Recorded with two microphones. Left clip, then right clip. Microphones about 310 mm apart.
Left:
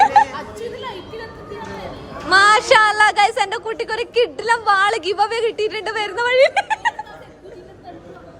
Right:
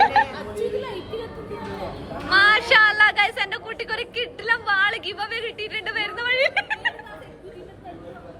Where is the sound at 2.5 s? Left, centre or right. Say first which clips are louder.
Left 3 dB; centre.